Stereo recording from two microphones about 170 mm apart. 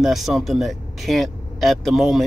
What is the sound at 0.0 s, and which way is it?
Speech, centre (ahead or behind).